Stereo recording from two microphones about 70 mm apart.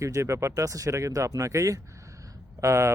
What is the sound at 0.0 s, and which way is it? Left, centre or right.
Speech, right.